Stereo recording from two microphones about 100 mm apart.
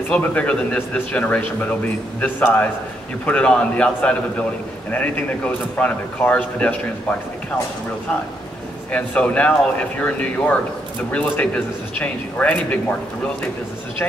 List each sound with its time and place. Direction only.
0.1 s a man's voice: 15° left (ahead or behind)
8.9 s a man's voice: 15° left (ahead or behind)